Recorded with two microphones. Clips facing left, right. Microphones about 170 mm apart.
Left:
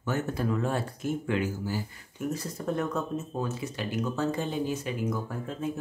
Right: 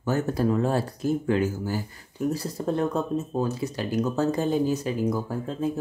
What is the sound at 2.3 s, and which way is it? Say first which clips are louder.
Speech: right 4 dB; 30° right (ahead or behind).